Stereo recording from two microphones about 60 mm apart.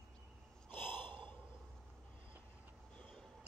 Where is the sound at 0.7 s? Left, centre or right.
Left.